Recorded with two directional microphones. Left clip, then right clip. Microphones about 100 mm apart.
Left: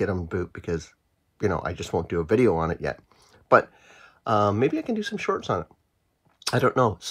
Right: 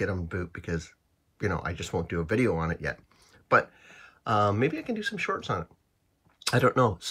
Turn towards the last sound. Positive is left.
turn(degrees=25)  # may be behind; listen again after turning